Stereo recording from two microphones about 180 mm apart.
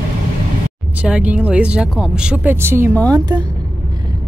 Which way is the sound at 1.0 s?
5° right (ahead or behind).